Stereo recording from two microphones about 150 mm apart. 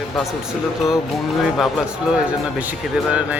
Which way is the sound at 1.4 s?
Centre (ahead or behind).